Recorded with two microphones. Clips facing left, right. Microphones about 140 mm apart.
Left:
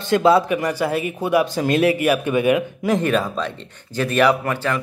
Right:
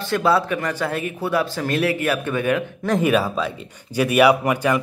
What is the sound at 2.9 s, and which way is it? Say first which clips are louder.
Speech: right 3 dB; 5° right (ahead or behind).